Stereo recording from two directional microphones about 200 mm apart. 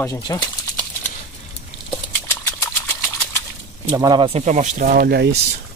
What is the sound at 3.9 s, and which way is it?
Speech, 20° right (ahead or behind).